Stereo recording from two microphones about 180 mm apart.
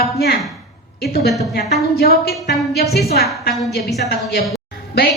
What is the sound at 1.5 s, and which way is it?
A woman's voice, 60° left (ahead or behind).